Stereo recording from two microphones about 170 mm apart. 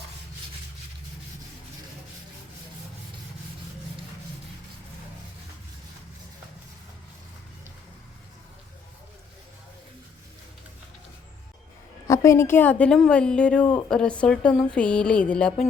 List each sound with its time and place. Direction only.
12.0 s a woman's voice: 20° left (ahead or behind)